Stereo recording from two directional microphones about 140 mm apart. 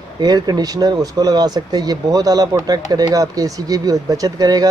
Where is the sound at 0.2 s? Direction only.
30° right (ahead or behind).